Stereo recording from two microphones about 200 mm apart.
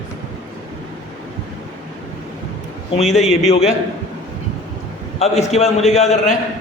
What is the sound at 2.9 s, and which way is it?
Speech, 35° left (ahead or behind).